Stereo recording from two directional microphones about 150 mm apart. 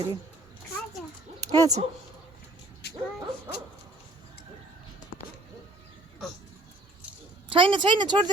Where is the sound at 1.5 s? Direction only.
25° right (ahead or behind).